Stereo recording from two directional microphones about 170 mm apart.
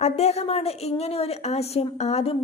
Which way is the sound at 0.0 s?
40° left (ahead or behind).